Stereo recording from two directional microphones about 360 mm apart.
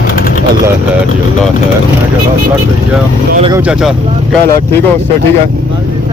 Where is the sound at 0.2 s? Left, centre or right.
Left.